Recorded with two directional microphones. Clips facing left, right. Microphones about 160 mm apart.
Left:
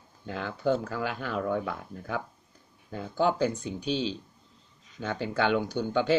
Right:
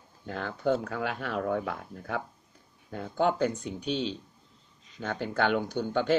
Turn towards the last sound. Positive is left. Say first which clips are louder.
# left 1 dB
turn(degrees=0)  # may be behind; listen again after turning